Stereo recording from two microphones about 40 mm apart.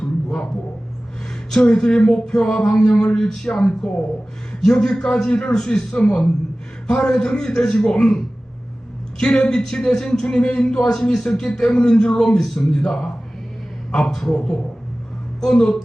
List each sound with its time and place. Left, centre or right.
0.0 s music: centre
1.5 s a man's voice: left
12.4 s a man's voice: centre